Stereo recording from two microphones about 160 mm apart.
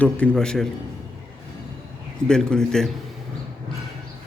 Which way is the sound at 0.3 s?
5° left (ahead or behind).